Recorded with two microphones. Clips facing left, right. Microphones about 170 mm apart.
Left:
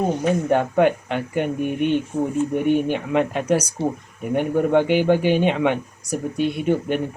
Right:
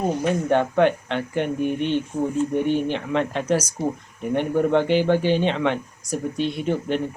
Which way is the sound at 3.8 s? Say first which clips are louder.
Left 2 dB; 30° left (ahead or behind).